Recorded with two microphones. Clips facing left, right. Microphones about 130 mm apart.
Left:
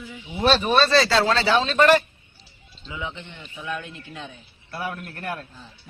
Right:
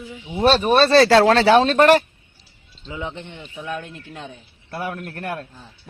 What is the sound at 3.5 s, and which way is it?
A man's voice, 45° right (ahead or behind).